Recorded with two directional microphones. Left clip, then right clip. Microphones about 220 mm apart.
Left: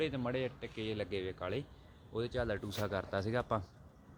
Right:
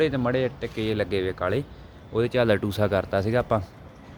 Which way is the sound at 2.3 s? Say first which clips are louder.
Right 17 dB; 45° right (ahead or behind).